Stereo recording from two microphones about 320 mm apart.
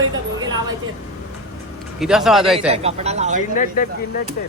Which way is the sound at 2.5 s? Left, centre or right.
Centre.